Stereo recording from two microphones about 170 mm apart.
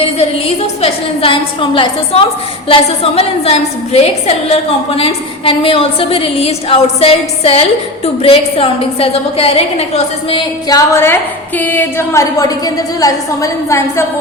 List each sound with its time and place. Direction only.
0.0 s a woman's voice: 35° left (ahead or behind); by 14.0 s 15° left (ahead or behind)